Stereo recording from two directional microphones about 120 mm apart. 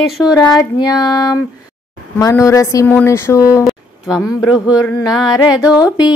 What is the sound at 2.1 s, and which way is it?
A woman's voice, 25° left (ahead or behind).